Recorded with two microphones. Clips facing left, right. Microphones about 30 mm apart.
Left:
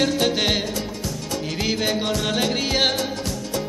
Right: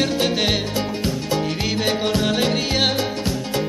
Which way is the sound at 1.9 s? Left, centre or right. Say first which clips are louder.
Right 3 dB; right.